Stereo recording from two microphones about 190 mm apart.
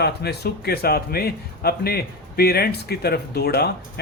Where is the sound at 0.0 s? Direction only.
60° left (ahead or behind).